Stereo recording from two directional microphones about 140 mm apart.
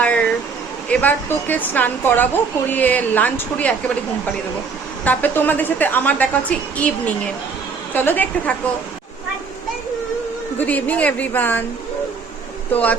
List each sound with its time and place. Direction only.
0.0 s vehicle: 10° left (ahead or behind)
0.9 s speech: 10° left (ahead or behind)
5.0 s speech: 15° left (ahead or behind)
10.6 s speech: 10° left (ahead or behind)
12.7 s speech: 10° left (ahead or behind)